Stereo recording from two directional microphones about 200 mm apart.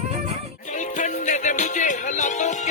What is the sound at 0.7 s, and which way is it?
Music, 40° left (ahead or behind).